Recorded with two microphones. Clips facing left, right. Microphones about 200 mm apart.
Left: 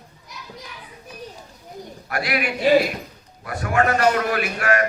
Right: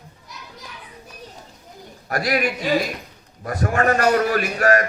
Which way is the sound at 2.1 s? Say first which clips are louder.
Right 3 dB; 40° right (ahead or behind).